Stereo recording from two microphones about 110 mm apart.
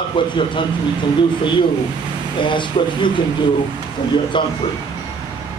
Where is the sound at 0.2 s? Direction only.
45° left (ahead or behind).